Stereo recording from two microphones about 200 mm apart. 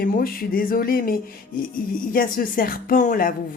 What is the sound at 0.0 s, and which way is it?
Speech, 45° left (ahead or behind).